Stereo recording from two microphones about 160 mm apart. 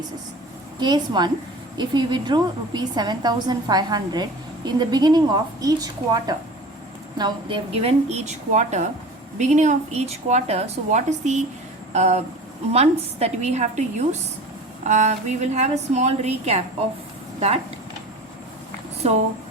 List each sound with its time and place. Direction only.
0.8 s a woman's voice: 25° right (ahead or behind); by 16.6 s 40° right (ahead or behind)
19.0 s a woman's voice: 40° right (ahead or behind)